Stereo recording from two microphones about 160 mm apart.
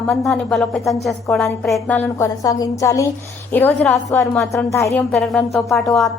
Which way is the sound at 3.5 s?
10° left (ahead or behind).